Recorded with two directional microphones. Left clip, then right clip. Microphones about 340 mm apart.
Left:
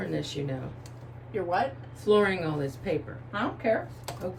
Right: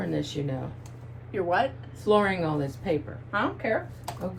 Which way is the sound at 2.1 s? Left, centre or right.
Centre.